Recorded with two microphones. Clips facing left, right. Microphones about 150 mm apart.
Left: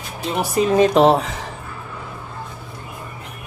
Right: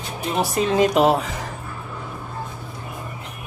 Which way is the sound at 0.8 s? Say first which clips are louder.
Left 3 dB; 30° left (ahead or behind).